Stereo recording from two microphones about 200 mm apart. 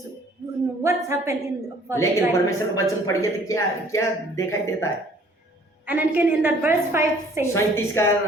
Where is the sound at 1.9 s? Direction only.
15° left (ahead or behind).